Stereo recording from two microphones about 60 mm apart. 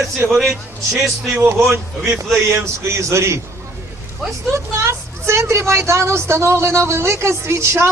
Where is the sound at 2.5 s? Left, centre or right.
Right.